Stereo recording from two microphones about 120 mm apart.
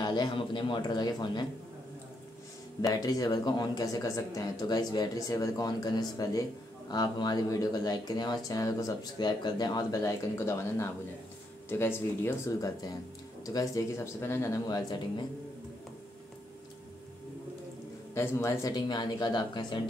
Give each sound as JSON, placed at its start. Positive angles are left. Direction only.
{"t": 0.0, "sound": "speech", "side_deg": 35}
{"t": 2.9, "sound": "speech", "side_deg": 35}
{"t": 18.1, "sound": "speech", "side_deg": 20}